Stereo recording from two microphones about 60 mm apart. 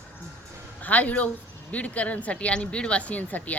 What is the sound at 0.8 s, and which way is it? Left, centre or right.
Speech, left.